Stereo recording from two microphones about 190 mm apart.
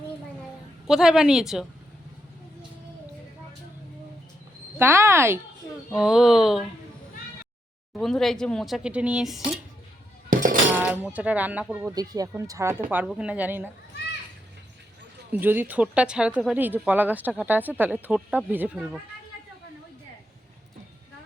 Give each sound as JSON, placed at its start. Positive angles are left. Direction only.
{"t": 0.9, "sound": "speech", "side_deg": -5}
{"t": 4.8, "sound": "speech", "side_deg": -10}
{"t": 5.9, "sound": "speech", "side_deg": -5}
{"t": 7.9, "sound": "speech", "side_deg": 0}
{"t": 10.2, "sound": "music", "side_deg": -45}
{"t": 10.8, "sound": "speech", "side_deg": -10}
{"t": 15.3, "sound": "speech", "side_deg": -10}